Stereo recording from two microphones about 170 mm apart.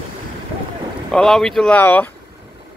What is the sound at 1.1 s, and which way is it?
Speech, 5° left (ahead or behind).